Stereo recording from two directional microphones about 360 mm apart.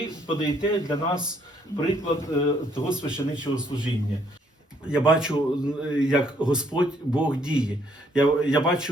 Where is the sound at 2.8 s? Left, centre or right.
Centre.